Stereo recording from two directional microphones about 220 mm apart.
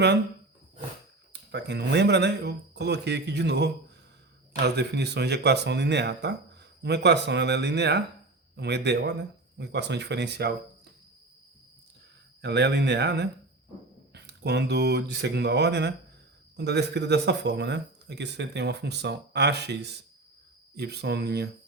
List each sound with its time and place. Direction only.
1.3 s speech: 50° right (ahead or behind)
12.4 s speech: 50° right (ahead or behind)